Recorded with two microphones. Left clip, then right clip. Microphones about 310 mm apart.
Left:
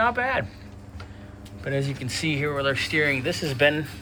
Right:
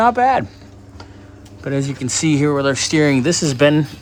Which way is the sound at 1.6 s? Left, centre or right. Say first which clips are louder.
Right 6 dB; right.